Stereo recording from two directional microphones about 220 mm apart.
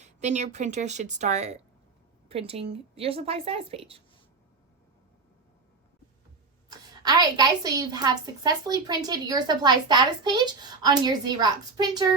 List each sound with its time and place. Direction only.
0.0 s a woman's voice: 30° right (ahead or behind)
6.7 s a woman's voice: 15° right (ahead or behind)